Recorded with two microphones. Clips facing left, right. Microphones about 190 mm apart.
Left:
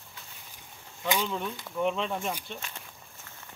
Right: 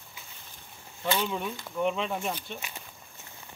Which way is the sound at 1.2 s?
5° right (ahead or behind).